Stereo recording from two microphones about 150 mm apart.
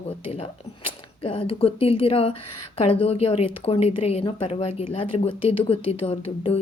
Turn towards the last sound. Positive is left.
turn(degrees=40)  # may be behind; listen again after turning